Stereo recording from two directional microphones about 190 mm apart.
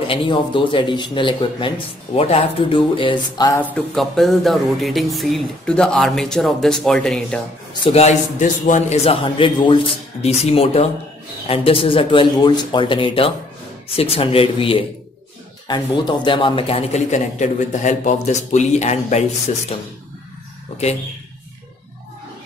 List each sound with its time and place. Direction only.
0.0 s speech: 25° left (ahead or behind)
3.7 s speech: centre (ahead or behind)
7.8 s a man's voice: 35° left (ahead or behind)